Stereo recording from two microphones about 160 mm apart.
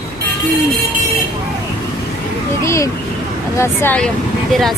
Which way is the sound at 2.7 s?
20° left (ahead or behind).